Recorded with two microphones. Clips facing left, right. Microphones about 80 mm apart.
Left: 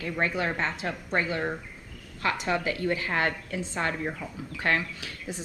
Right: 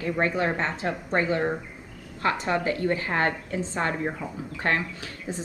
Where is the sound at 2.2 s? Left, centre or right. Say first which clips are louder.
Right 3 dB; right.